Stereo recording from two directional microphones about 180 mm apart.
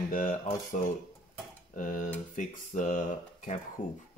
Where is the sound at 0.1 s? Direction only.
50° left (ahead or behind).